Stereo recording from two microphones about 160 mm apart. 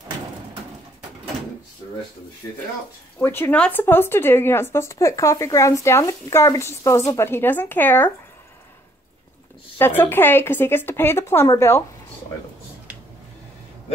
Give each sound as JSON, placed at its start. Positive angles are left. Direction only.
{"t": 3.2, "sound": "speech", "side_deg": 15}
{"t": 9.8, "sound": "speech", "side_deg": 15}